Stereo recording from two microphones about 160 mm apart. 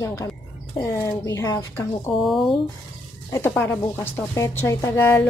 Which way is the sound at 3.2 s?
15° left (ahead or behind).